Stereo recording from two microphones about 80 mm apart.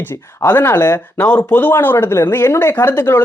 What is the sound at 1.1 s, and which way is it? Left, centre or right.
Speech, centre.